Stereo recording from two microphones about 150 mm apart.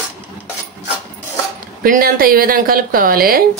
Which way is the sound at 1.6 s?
70° right (ahead or behind).